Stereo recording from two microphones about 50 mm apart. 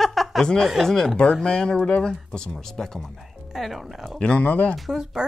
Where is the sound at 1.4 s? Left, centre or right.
Centre.